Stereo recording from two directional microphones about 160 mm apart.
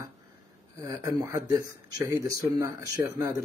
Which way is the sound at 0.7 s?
20° right (ahead or behind).